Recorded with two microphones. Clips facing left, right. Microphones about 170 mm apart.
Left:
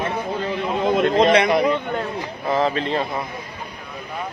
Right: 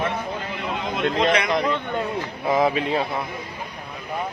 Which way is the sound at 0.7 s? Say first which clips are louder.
Left 6 dB; 45° left (ahead or behind).